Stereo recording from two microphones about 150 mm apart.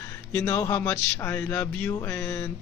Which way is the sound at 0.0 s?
15° left (ahead or behind).